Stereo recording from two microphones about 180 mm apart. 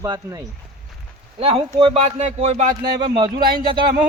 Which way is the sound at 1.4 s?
35° right (ahead or behind).